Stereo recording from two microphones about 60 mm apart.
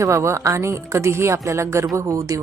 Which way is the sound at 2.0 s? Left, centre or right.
Right.